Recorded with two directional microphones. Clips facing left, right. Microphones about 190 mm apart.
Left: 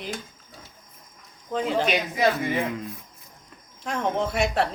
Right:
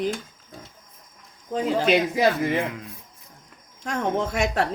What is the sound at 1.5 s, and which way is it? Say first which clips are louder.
Speech: right 3 dB; 35° right (ahead or behind).